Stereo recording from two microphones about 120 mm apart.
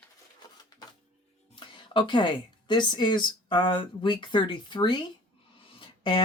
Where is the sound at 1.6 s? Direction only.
40° left (ahead or behind).